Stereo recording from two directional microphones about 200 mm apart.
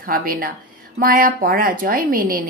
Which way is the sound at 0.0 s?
45° right (ahead or behind).